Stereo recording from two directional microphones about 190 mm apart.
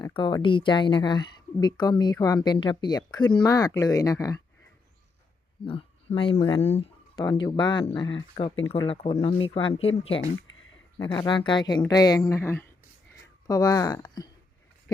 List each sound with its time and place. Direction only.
0.0 s speech: 25° left (ahead or behind)
5.6 s speech: 30° left (ahead or behind)